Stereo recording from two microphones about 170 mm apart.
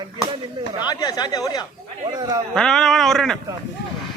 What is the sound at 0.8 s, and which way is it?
Speech, 25° left (ahead or behind).